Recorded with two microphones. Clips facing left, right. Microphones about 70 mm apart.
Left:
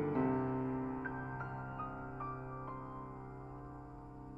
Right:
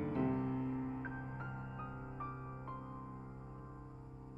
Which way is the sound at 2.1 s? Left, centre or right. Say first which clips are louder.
Left 2 dB; centre.